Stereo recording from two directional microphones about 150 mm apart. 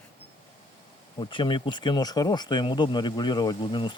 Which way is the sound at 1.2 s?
35° left (ahead or behind).